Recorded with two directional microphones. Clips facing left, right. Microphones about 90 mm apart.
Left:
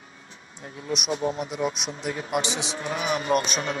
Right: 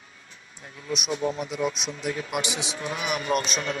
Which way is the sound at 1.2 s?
30° left (ahead or behind).